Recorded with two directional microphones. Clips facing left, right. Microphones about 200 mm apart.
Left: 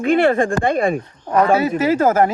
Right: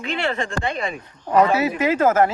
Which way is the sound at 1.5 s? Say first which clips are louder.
Left 4 dB; 30° left (ahead or behind).